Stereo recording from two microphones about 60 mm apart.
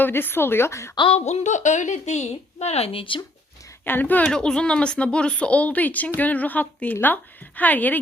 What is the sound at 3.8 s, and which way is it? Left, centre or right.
Speech, left.